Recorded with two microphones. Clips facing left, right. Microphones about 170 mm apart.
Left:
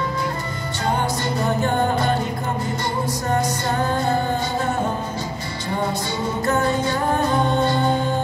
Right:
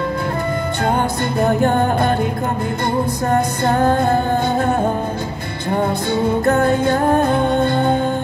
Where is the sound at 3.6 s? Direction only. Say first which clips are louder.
Right 6 dB; 55° right (ahead or behind).